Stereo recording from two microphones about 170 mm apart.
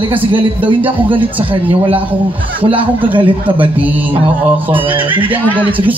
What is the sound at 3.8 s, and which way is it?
Music, 10° right (ahead or behind).